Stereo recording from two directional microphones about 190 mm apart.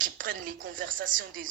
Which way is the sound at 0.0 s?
45° right (ahead or behind).